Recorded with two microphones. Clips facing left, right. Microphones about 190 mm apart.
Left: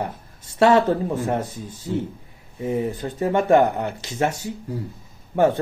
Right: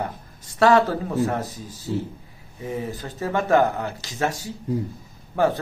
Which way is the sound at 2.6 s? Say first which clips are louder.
Left 5 dB; 25° left (ahead or behind).